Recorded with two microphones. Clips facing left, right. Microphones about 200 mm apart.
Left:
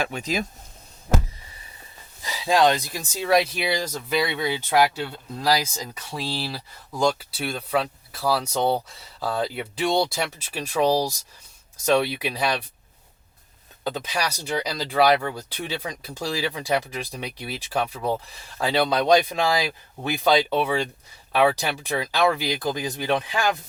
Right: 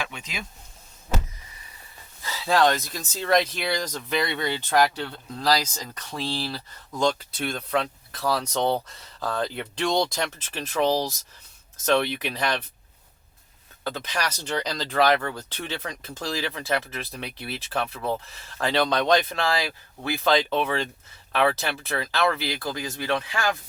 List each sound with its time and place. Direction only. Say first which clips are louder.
0.0 s speech: left 8 dB; 40° left (ahead or behind)
2.2 s speech: left 2 dB; 15° left (ahead or behind)
13.8 s speech: left 2 dB; 15° left (ahead or behind)